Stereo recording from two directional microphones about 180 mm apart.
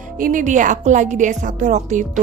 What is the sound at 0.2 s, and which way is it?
A woman's voice, 45° right (ahead or behind).